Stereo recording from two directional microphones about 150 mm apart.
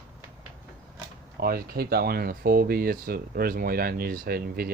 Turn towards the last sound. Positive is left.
turn(degrees=-90)